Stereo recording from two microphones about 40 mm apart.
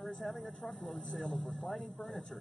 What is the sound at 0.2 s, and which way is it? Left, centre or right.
Speech, centre.